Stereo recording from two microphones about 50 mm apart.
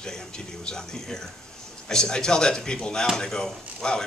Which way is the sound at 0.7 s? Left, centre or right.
Centre.